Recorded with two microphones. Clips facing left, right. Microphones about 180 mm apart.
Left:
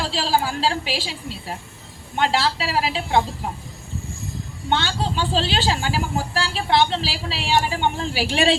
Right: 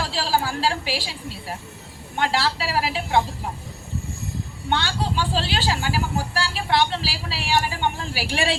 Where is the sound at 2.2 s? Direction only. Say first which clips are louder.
Left 2 dB; 15° left (ahead or behind).